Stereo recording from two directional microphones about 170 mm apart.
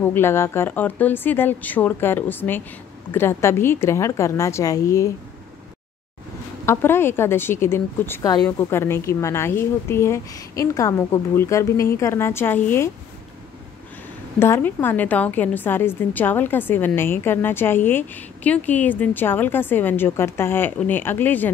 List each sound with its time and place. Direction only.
0.0 s a woman's voice: 15° left (ahead or behind)
6.6 s a woman's voice: 15° left (ahead or behind)
14.4 s a woman's voice: 10° left (ahead or behind)